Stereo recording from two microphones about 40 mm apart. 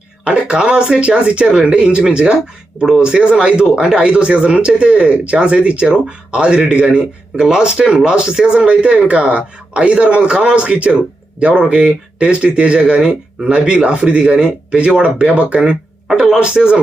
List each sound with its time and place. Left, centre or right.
0.3 s speech: right